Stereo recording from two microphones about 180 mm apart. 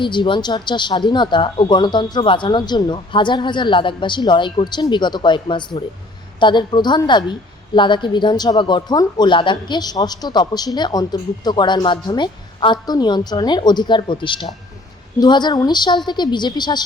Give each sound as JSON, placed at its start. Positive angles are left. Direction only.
{"t": 0.0, "sound": "a woman's voice", "side_deg": 25}